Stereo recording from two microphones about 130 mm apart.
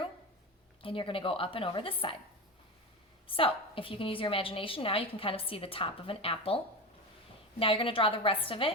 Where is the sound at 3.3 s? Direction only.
45° left (ahead or behind).